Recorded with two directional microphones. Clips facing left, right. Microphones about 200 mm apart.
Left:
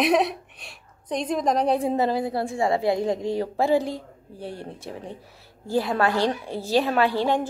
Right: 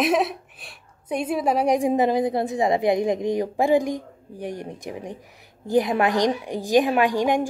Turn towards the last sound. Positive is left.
turn(degrees=-15)  # may be behind; listen again after turning